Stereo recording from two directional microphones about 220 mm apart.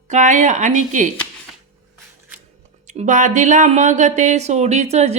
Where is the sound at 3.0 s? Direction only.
35° right (ahead or behind).